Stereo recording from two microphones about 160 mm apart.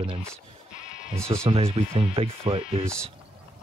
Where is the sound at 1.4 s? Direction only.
35° right (ahead or behind).